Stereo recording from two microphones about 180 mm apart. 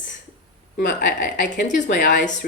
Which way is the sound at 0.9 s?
55° left (ahead or behind).